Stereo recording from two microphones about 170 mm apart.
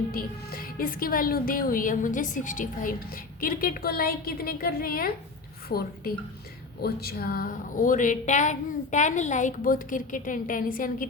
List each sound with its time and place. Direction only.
0.1 s a woman's voice: 60° left (ahead or behind)